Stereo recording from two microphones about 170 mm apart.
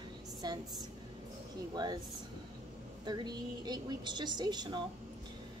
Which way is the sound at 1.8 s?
25° right (ahead or behind).